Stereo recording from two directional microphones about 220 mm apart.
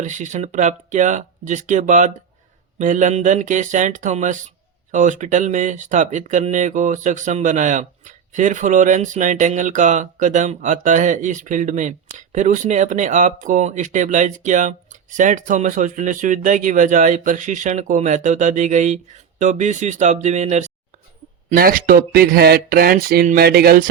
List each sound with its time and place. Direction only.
0.0 s speech: 35° right (ahead or behind)